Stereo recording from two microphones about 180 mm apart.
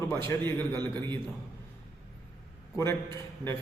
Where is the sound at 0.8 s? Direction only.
25° right (ahead or behind).